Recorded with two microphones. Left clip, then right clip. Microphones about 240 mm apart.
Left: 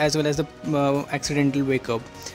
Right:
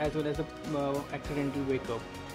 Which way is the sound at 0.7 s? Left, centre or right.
Left.